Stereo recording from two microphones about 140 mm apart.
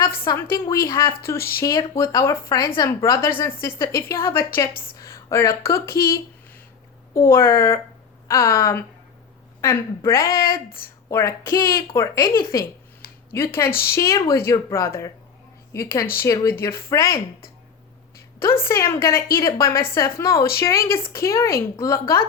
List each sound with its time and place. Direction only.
0.5 s a woman's voice: 20° left (ahead or behind)
1.4 s speech: 90° left
1.6 s a woman's voice: 20° left (ahead or behind)
7.3 s a woman's voice: 20° left (ahead or behind)
10.2 s speech: 90° left
11.1 s a woman's voice: 20° left (ahead or behind)
18.3 s a woman's voice: 15° left (ahead or behind)